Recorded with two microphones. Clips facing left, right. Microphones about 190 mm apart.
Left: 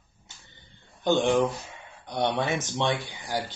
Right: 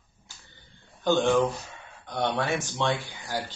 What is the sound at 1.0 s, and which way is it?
Speech, 15° left (ahead or behind).